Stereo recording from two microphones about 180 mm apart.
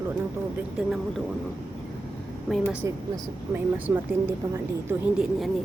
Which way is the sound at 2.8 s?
15° right (ahead or behind).